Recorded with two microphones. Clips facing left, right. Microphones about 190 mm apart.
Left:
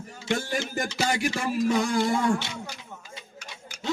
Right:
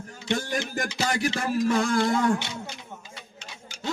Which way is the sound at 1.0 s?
10° left (ahead or behind).